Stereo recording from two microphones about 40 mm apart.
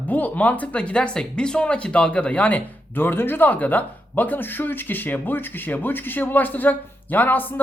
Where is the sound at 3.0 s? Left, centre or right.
Left.